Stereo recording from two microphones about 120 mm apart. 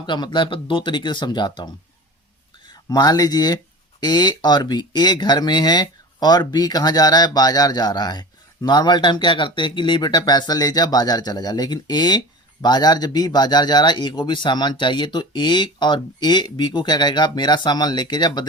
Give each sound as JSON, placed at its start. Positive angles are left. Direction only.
{"t": 0.0, "sound": "speech", "side_deg": 40}